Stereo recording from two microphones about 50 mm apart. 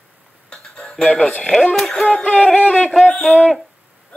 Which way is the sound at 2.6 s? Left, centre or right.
Left.